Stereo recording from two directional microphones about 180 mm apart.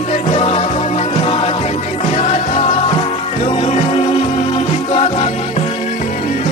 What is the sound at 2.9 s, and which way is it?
Music, 35° left (ahead or behind).